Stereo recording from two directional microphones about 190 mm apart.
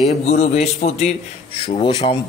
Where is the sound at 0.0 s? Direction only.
35° left (ahead or behind).